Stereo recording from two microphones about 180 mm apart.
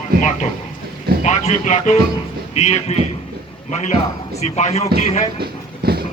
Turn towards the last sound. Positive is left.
turn(degrees=-60)  # may be behind; listen again after turning